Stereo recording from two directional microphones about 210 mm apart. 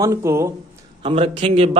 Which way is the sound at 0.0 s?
15° right (ahead or behind).